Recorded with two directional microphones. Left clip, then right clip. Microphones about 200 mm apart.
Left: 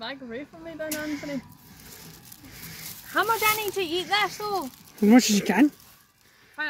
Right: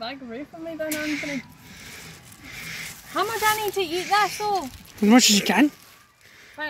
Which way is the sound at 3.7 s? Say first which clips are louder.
Right 3 dB; 15° left (ahead or behind).